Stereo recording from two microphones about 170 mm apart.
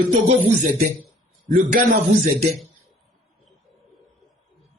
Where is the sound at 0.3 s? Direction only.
40° right (ahead or behind).